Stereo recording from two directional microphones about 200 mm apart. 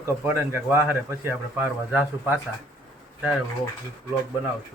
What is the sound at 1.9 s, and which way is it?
Speech, 5° right (ahead or behind).